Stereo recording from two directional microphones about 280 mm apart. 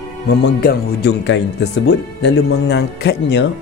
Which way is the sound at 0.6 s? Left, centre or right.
Left.